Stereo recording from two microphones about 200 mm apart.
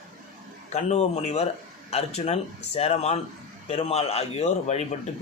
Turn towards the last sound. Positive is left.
turn(degrees=35)  # may be behind; listen again after turning